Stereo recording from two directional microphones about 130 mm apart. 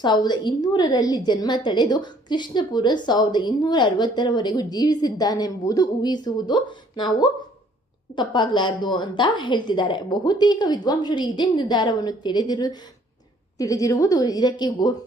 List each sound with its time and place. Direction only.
0.0 s a woman's voice: 35° left (ahead or behind)